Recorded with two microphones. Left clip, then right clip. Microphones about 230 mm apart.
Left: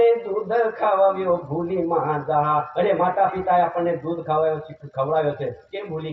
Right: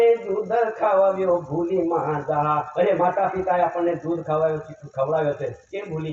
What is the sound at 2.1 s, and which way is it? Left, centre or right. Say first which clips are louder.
Speech: left 2 dB; left.